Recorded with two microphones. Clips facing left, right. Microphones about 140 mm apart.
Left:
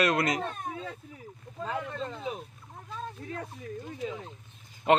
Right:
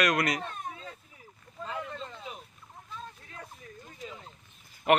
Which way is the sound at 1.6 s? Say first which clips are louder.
Left 4 dB; 75° left (ahead or behind).